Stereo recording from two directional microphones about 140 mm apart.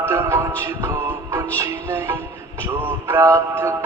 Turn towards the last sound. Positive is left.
turn(degrees=-20)  # may be behind; listen again after turning